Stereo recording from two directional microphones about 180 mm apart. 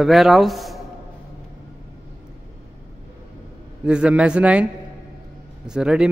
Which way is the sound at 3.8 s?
5° right (ahead or behind).